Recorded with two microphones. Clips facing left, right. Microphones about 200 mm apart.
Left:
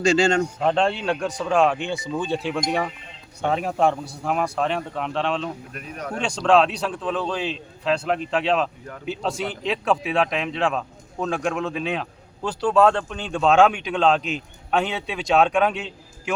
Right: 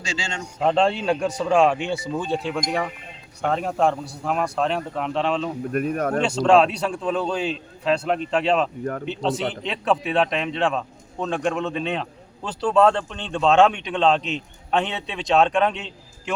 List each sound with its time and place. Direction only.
0.0 s a man's voice: 55° left (ahead or behind)
0.6 s a man's voice: centre (ahead or behind)
5.7 s speech: 50° right (ahead or behind)
6.2 s a man's voice: 5° right (ahead or behind)